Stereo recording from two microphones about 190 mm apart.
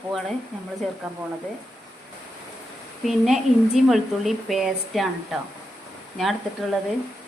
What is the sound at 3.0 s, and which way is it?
A woman's voice, centre (ahead or behind).